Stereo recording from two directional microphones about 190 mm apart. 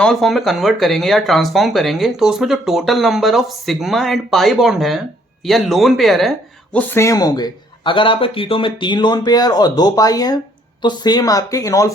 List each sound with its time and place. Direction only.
0.0 s speech: centre (ahead or behind)
6.7 s speech: 15° left (ahead or behind)